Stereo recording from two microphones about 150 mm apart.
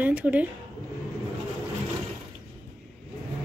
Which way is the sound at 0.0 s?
10° right (ahead or behind).